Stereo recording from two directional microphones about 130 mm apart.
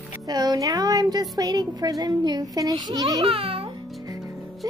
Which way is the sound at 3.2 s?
45° right (ahead or behind).